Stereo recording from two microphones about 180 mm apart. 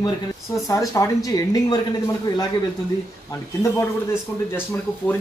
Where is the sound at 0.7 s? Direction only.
20° left (ahead or behind).